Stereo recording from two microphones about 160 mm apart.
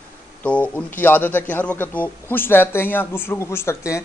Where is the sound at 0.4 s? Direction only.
10° left (ahead or behind).